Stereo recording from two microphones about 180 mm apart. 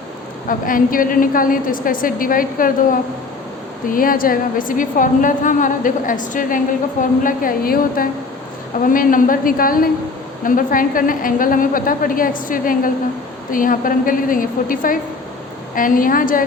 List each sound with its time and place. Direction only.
0.4 s a woman's voice: 50° left (ahead or behind)